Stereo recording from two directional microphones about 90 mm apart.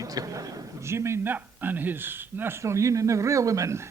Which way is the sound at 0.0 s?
40° right (ahead or behind).